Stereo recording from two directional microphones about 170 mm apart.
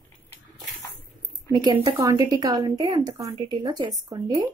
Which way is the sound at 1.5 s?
25° right (ahead or behind).